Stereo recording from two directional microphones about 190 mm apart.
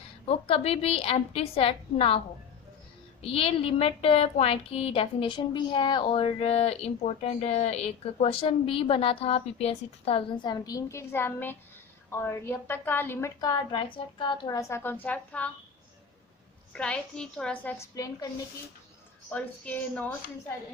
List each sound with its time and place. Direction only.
0.3 s a woman's voice: 30° left (ahead or behind)
3.2 s a woman's voice: 30° left (ahead or behind); by 15.4 s 10° left (ahead or behind)
16.7 s a woman's voice: 5° left (ahead or behind)